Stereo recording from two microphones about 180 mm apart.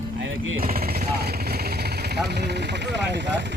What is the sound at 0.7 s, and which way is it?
Vehicle, 55° right (ahead or behind).